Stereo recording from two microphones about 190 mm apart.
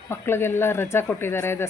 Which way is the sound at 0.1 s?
10° left (ahead or behind).